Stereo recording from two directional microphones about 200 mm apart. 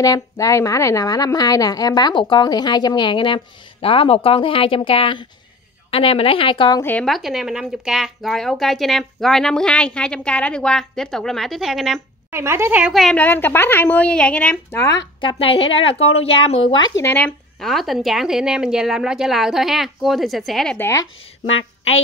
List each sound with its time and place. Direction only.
0.0 s a woman's voice: 15° left (ahead or behind)
6.8 s speech: 5° left (ahead or behind)
12.3 s a woman's voice: 10° right (ahead or behind); by 21.1 s 15° left (ahead or behind)